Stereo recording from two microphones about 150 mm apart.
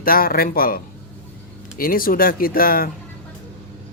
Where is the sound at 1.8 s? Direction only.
75° left (ahead or behind).